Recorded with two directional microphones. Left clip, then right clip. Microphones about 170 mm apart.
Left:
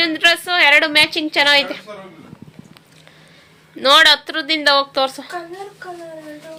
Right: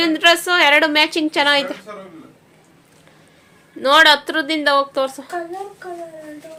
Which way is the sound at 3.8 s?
10° right (ahead or behind).